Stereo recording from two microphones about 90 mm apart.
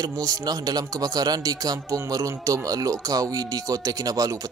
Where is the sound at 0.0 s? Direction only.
45° right (ahead or behind).